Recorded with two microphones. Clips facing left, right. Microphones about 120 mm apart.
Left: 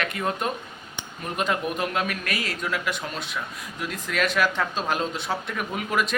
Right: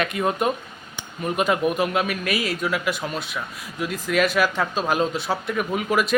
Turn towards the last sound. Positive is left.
turn(degrees=-5)  # may be behind; listen again after turning